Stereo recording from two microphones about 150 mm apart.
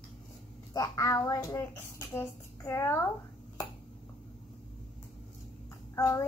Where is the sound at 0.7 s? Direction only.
25° left (ahead or behind).